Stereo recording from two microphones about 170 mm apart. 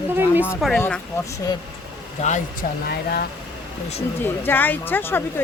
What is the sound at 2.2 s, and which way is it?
Speech, 45° left (ahead or behind).